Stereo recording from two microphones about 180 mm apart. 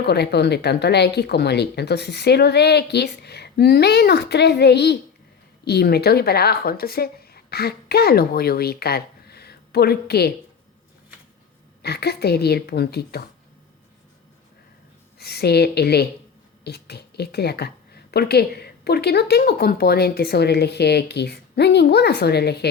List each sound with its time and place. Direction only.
0.0 s speech: 65° left (ahead or behind)
11.8 s a woman's voice: 65° left (ahead or behind)
15.2 s a woman's voice: 65° left (ahead or behind)